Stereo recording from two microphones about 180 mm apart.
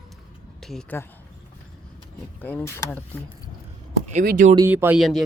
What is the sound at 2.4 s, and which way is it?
Speech, 10° left (ahead or behind).